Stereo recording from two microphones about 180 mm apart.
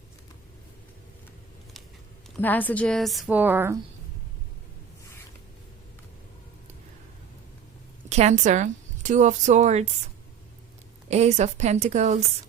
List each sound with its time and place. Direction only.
2.3 s a woman's voice: 10° left (ahead or behind); by 3.8 s 10° right (ahead or behind)
8.1 s a woman's voice: 40° right (ahead or behind)
11.1 s a woman's voice: 40° right (ahead or behind)